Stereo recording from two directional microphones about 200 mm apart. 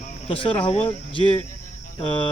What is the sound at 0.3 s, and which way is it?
Speech, 25° left (ahead or behind).